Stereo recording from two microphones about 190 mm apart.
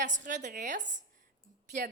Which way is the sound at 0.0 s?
40° right (ahead or behind).